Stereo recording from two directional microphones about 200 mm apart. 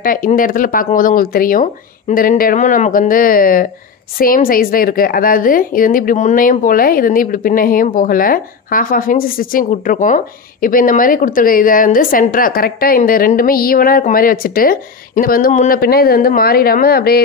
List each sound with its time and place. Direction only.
0.0 s a woman's voice: 45° left (ahead or behind)